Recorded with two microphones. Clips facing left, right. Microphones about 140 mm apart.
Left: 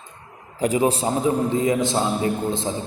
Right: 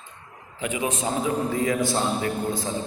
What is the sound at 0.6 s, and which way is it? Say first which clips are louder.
A man's voice: left 7 dB; 35° left (ahead or behind).